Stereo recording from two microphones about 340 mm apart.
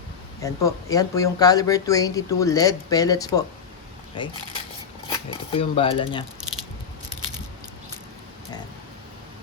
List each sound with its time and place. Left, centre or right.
0.4 s speech: centre